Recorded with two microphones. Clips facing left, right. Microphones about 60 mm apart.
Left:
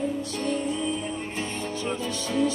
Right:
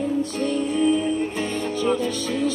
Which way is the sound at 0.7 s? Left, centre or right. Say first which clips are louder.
Right 9 dB; right.